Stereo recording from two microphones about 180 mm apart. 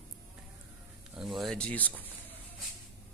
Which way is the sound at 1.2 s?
Centre (ahead or behind).